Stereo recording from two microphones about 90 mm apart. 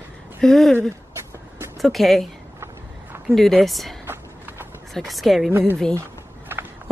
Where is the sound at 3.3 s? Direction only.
5° left (ahead or behind).